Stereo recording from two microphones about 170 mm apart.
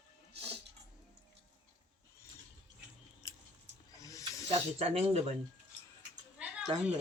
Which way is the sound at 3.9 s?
20° left (ahead or behind).